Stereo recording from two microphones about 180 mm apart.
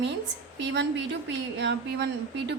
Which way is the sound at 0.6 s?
80° right.